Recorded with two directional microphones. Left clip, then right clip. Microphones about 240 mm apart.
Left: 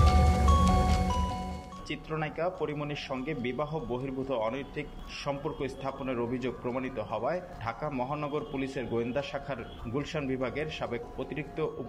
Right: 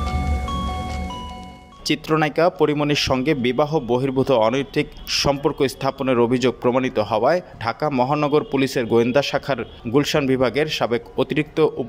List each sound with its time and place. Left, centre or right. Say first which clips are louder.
1.9 s a man's voice: right 16 dB; right